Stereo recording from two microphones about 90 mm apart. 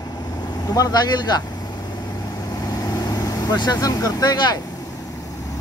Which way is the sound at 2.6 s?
45° left (ahead or behind).